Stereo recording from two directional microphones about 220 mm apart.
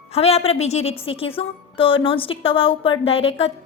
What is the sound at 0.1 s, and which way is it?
Speech, 25° left (ahead or behind).